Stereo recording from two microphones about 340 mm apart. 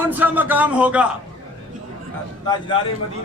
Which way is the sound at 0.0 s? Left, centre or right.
Centre.